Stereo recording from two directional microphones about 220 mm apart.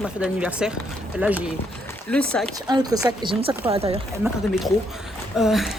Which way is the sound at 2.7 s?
15° right (ahead or behind).